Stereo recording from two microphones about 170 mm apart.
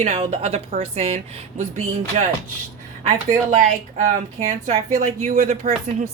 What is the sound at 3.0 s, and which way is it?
A woman's voice, 45° right (ahead or behind).